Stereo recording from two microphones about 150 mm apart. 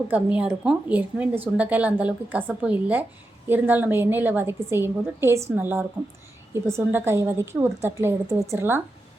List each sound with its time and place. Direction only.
0.1 s a woman's voice: 10° right (ahead or behind)